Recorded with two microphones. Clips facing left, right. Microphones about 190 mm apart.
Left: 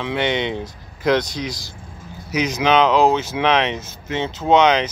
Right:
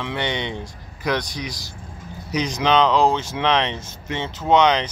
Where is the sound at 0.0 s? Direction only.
20° left (ahead or behind).